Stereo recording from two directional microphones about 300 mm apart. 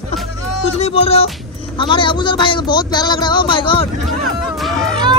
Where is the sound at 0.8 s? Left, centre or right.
Centre.